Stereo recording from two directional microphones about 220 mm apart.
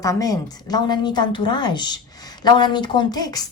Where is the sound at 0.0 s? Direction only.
15° left (ahead or behind).